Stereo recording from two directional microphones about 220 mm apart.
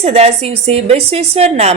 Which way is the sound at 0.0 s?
30° right (ahead or behind).